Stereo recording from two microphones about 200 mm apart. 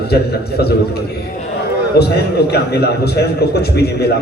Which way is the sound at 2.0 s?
55° left (ahead or behind).